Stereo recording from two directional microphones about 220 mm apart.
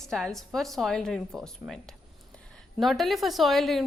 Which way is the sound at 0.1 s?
Centre (ahead or behind).